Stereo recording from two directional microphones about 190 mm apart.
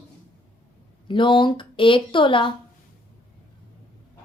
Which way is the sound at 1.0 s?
25° left (ahead or behind).